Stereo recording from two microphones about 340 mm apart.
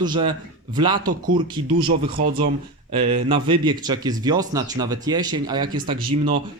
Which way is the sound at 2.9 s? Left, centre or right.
Centre.